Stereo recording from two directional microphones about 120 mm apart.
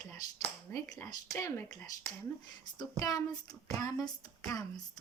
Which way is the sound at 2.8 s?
30° left (ahead or behind).